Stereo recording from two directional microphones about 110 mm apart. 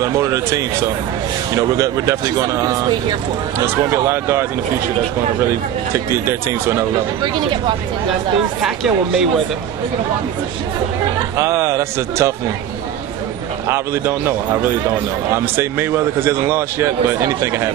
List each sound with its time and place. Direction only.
0.0 s speech: 25° right (ahead or behind)
5.9 s speech: 25° right (ahead or behind)
7.3 s speech: 45° right (ahead or behind)
8.6 s speech: 5° right (ahead or behind)
11.3 s speech: 25° right (ahead or behind)
13.7 s speech: 20° right (ahead or behind)